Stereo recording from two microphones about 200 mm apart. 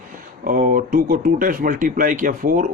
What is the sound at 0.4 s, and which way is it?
Speech, 40° right (ahead or behind).